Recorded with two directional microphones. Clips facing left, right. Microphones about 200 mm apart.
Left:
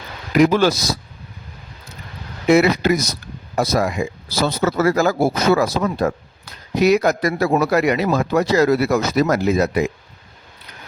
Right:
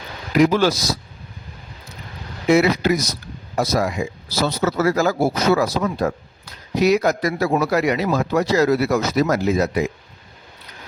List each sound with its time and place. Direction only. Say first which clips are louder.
0.3 s a man's voice: left 1 dB; 55° left (ahead or behind)
2.5 s a man's voice: left 2 dB; 55° left (ahead or behind)